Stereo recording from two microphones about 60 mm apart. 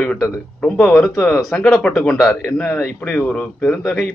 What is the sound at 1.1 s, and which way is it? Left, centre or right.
Speech, left.